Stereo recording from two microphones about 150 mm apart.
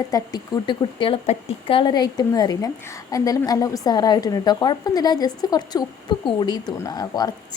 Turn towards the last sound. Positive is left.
turn(degrees=25)  # may be behind; listen again after turning